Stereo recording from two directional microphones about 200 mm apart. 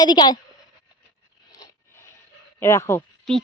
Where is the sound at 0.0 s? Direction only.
20° left (ahead or behind).